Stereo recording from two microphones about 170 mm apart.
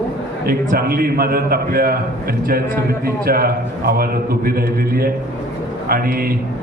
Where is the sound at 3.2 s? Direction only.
60° right (ahead or behind).